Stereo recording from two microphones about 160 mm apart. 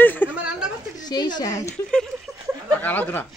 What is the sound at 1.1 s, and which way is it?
Speech, 25° left (ahead or behind).